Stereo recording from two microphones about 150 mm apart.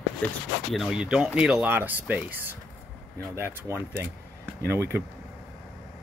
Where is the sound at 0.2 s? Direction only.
10° left (ahead or behind).